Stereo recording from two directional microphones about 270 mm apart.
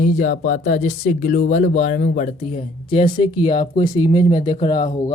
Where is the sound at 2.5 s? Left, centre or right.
Centre.